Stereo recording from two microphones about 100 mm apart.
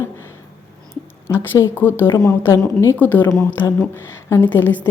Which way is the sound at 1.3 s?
25° left (ahead or behind).